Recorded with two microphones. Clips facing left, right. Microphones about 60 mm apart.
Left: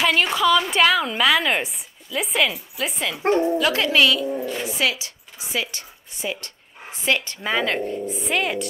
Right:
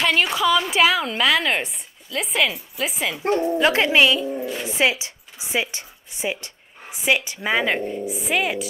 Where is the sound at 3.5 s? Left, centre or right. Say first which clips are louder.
Right 2 dB; right.